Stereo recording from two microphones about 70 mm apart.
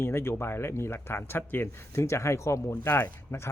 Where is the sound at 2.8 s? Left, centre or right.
Left.